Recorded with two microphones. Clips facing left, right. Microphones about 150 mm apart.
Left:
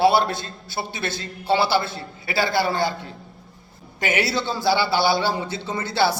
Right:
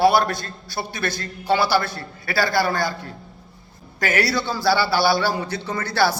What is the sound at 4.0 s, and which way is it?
A man's voice, 20° left (ahead or behind).